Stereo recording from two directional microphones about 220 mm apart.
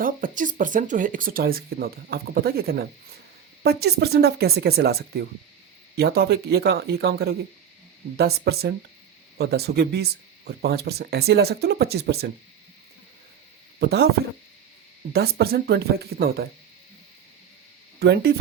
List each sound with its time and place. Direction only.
0.0 s speech: 40° right (ahead or behind)
13.7 s speech: 45° right (ahead or behind)
15.1 s speech: 45° right (ahead or behind)
18.0 s speech: 45° right (ahead or behind)